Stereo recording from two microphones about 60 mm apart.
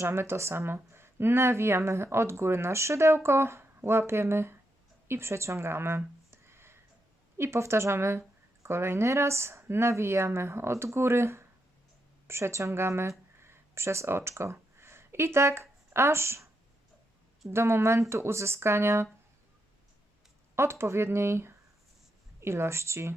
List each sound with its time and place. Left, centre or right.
0.0 s speech: right
6.3 s a sound: right
7.3 s speech: right
17.5 s speech: right
20.6 s speech: right